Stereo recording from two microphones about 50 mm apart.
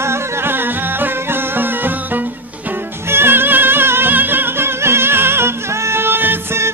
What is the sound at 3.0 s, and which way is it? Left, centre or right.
Music, right.